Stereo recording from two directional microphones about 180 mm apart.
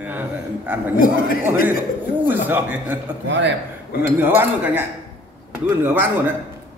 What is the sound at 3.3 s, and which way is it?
Speech, 85° right.